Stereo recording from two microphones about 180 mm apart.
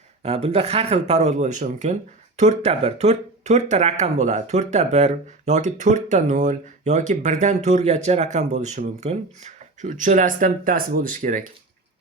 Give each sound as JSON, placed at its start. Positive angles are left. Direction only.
{"t": 0.2, "sound": "speech", "side_deg": -35}